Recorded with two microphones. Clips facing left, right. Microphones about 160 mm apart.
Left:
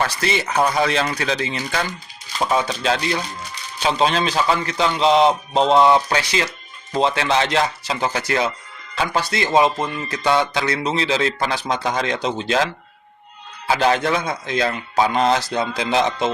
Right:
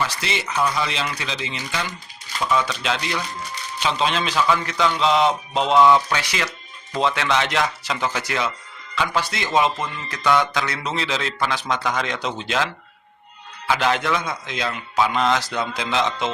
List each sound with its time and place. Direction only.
0.0 s speech: 50° left (ahead or behind)
15.4 s speech: 25° left (ahead or behind)